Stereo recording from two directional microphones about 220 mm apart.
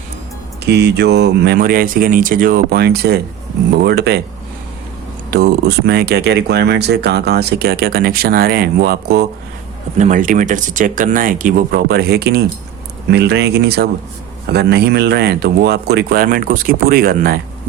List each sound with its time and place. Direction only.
0.6 s speech: 50° right (ahead or behind)
5.3 s speech: 45° right (ahead or behind)
10.0 s speech: 35° right (ahead or behind)